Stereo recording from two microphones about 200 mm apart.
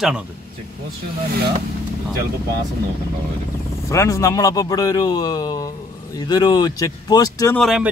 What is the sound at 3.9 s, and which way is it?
Speech, 15° left (ahead or behind).